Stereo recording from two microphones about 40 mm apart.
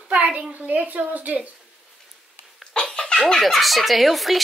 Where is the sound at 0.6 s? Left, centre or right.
Right.